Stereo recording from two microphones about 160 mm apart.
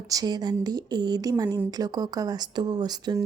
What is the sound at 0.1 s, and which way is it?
Speech, 25° right (ahead or behind).